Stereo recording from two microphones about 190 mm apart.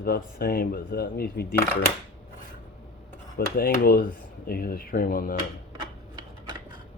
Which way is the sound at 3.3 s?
50° left (ahead or behind).